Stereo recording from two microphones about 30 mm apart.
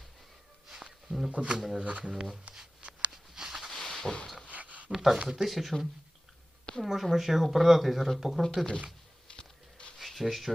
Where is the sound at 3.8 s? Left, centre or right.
Centre.